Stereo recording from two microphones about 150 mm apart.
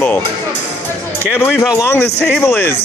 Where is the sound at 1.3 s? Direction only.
10° left (ahead or behind).